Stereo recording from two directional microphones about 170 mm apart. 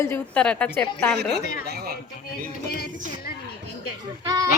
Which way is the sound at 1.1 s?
75° right (ahead or behind).